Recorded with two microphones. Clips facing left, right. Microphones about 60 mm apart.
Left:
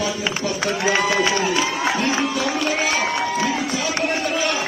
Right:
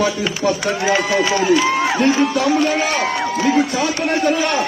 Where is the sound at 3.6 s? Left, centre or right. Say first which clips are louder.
Right 7 dB; right.